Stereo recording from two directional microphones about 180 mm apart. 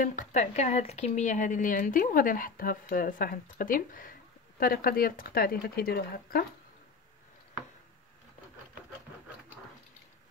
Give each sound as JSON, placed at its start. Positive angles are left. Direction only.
{"t": 0.0, "sound": "a woman's voice", "side_deg": 45}